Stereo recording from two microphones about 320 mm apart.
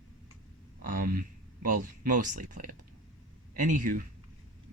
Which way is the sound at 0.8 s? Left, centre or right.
Right.